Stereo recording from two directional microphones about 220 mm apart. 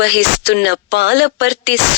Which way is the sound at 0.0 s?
55° left (ahead or behind).